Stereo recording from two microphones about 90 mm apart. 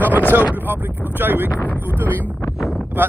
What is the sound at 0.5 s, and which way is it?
Speech, 20° right (ahead or behind).